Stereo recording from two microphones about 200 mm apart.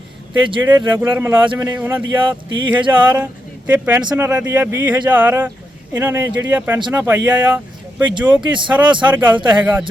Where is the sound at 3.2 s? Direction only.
10° right (ahead or behind).